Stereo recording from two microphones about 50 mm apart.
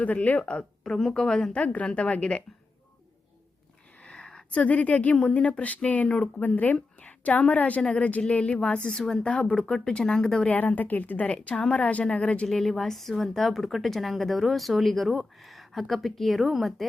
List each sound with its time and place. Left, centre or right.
0.0 s speech: left
0.9 s speech: centre
1.5 s speech: left
4.0 s a sound: left
4.6 s a woman's voice: left
8.9 s speech: centre
9.3 s speech: left
9.6 s speech: centre
10.5 s speech: left
11.3 s speech: centre
12.5 s a woman's voice: centre